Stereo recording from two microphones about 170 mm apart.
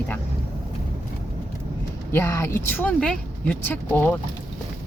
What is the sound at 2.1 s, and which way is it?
Speech, 15° left (ahead or behind).